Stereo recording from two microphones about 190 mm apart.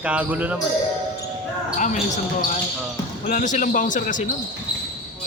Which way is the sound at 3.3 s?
40° left (ahead or behind).